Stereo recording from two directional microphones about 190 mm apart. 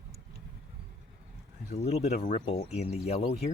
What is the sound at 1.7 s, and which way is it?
Speech, 35° left (ahead or behind).